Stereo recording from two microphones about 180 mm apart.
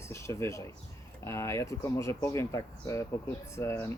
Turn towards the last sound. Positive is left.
turn(degrees=15)  # may be behind; listen again after turning